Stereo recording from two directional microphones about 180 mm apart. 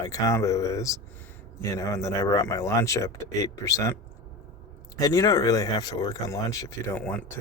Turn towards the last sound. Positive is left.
turn(degrees=10)  # may be behind; listen again after turning